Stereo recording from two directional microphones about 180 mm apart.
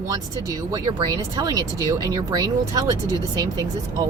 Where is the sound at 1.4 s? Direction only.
20° right (ahead or behind).